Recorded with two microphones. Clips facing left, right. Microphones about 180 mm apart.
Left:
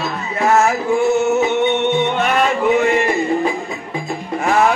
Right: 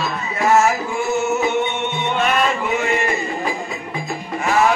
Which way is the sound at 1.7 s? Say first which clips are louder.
Left 6 dB; 60° left (ahead or behind).